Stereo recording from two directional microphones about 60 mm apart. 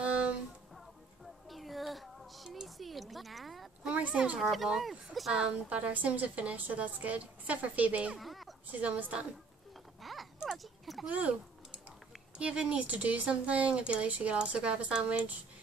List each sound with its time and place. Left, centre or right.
0.0 s music: centre
1.5 s music: centre
3.9 s speech: right
4.4 s speech: centre
5.4 s speech: right
8.2 s a sound: centre
8.7 s speech: right
10.0 s a sound: centre
12.4 s speech: centre